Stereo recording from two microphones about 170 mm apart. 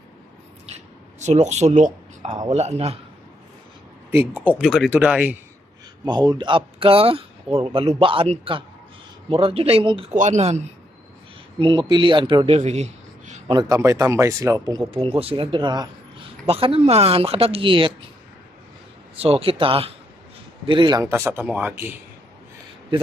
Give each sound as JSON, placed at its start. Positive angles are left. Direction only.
{"t": 1.2, "sound": "a man's voice", "side_deg": -45}
{"t": 4.1, "sound": "speech", "side_deg": -15}
{"t": 6.1, "sound": "a man's voice", "side_deg": -25}
{"t": 10.1, "sound": "speech", "side_deg": -45}
{"t": 11.6, "sound": "speech", "side_deg": -30}
{"t": 13.5, "sound": "speech", "side_deg": -20}
{"t": 14.8, "sound": "a man's voice", "side_deg": -30}
{"t": 19.2, "sound": "a man's voice", "side_deg": -35}